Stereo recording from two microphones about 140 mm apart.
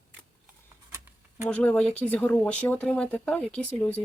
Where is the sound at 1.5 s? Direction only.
10° left (ahead or behind).